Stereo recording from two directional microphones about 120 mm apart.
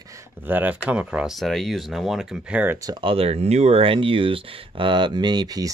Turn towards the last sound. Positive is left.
turn(degrees=-35)  # may be behind; listen again after turning